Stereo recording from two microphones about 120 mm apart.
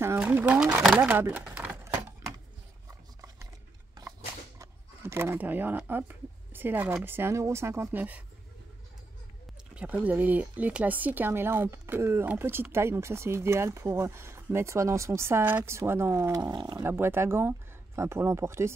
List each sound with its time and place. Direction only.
0.2 s speech: 15° right (ahead or behind)
1.4 s a sound: 10° right (ahead or behind)
4.6 s speech: 20° right (ahead or behind)
9.8 s speech: 15° right (ahead or behind)
16.5 s speech: 40° right (ahead or behind)
16.8 s speech: 20° right (ahead or behind)